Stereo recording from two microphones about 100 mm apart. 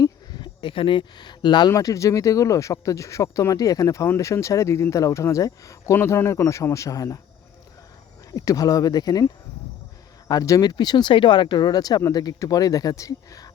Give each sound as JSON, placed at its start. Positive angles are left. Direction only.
{"t": 0.0, "sound": "a sound", "side_deg": 50}
{"t": 1.7, "sound": "speech", "side_deg": 30}
{"t": 8.3, "sound": "speech", "side_deg": 35}
{"t": 10.2, "sound": "speech", "side_deg": 35}